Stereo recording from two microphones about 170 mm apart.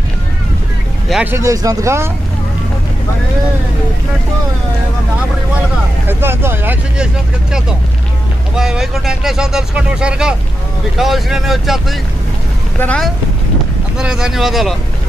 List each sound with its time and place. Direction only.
1.0 s music: 5° right (ahead or behind)
1.3 s speech: 20° right (ahead or behind)
6.0 s speech: 15° right (ahead or behind)
8.5 s speech: 5° right (ahead or behind)